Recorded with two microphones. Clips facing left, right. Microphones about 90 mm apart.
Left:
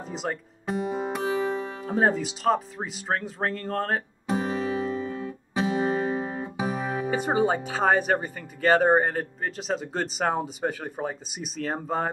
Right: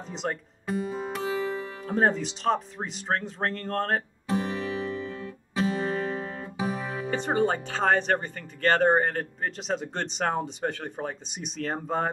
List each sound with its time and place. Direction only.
0.0 s speech: 5° left (ahead or behind)
0.7 s music: 20° left (ahead or behind)
2.0 s speech: 5° left (ahead or behind)
4.3 s music: 20° left (ahead or behind); by 12.1 s centre (ahead or behind)